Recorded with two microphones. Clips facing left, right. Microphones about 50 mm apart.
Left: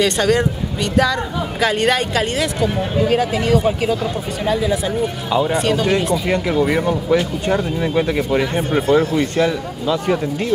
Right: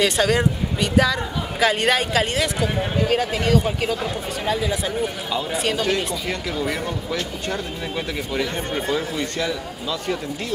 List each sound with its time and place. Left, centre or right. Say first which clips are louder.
0.0 s speech: left 3 dB; centre
6.2 s speech: left 8 dB; left